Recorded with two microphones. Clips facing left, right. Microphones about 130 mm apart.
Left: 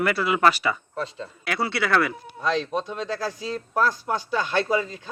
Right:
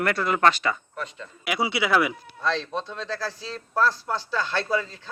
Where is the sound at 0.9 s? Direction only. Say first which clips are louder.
Left 4 dB; 30° left (ahead or behind).